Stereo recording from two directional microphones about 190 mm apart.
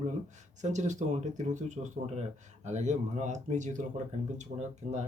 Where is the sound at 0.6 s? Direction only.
40° right (ahead or behind).